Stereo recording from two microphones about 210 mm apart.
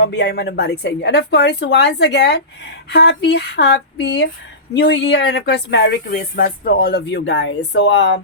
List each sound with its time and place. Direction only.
0.0 s speech: 55° left (ahead or behind)